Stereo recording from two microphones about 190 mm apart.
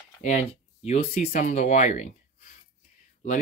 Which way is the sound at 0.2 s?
40° left (ahead or behind).